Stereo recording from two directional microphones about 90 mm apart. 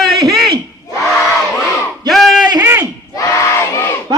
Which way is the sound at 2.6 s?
25° right (ahead or behind).